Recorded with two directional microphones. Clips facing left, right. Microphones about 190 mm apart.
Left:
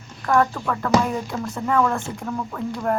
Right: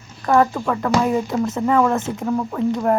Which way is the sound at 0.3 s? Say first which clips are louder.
Right 3 dB; 20° right (ahead or behind).